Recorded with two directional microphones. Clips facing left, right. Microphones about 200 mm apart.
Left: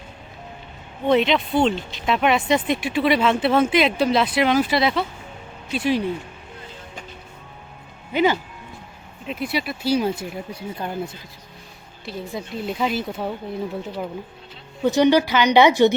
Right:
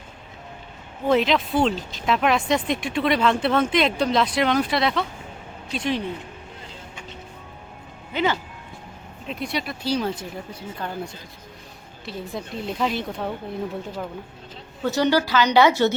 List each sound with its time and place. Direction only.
1.0 s speech: centre (ahead or behind)
8.1 s speech: 15° left (ahead or behind)
9.2 s speech: 5° left (ahead or behind)
12.0 s speech: centre (ahead or behind)
14.8 s speech: 15° left (ahead or behind)